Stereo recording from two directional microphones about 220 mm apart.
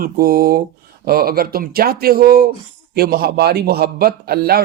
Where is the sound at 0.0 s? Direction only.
40° right (ahead or behind).